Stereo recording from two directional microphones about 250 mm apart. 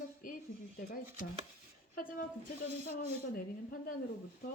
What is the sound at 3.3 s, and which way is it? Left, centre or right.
Speech, left.